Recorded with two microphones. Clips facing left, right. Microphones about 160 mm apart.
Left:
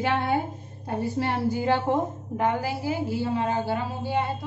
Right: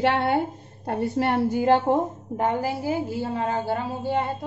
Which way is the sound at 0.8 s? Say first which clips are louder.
Right 3 dB; 60° right (ahead or behind).